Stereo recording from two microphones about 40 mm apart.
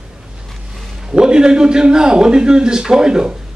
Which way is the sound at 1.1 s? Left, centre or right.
Right.